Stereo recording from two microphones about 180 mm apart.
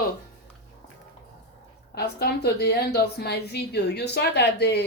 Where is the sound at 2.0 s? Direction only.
65° left (ahead or behind).